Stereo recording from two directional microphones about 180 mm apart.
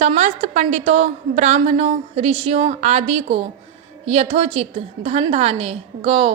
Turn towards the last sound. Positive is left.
turn(degrees=-30)  # may be behind; listen again after turning